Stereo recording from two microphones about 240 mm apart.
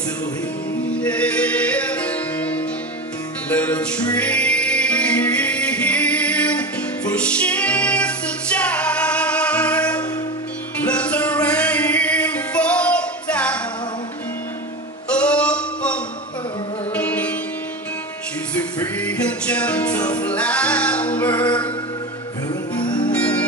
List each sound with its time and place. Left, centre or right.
1.0 s music: centre
15.0 s music: centre
18.9 s music: centre
22.5 s music: centre
23.1 s music: centre